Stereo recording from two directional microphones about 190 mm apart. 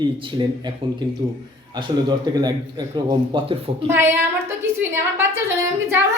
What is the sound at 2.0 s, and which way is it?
A man's voice, 20° right (ahead or behind).